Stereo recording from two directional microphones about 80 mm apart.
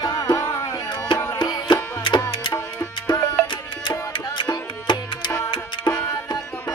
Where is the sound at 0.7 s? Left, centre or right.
Left.